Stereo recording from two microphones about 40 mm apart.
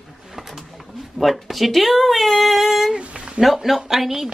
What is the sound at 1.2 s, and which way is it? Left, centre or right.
Speech, centre.